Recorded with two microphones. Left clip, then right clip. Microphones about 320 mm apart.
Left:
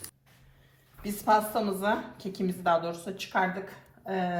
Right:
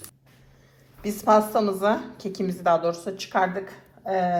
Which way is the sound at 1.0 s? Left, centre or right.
Right.